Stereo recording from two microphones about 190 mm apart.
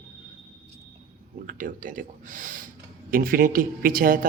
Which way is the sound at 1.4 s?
45° right (ahead or behind).